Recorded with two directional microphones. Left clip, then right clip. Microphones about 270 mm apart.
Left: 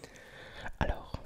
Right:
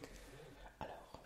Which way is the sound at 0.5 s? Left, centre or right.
Left.